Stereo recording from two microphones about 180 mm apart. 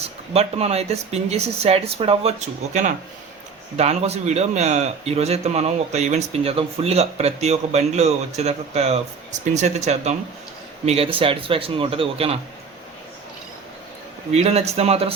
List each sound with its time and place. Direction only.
0.3 s a man's voice: 35° right (ahead or behind)
14.3 s a man's voice: 35° right (ahead or behind)